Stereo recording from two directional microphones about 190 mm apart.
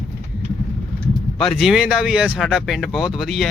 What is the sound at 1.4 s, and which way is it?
Speech, centre (ahead or behind).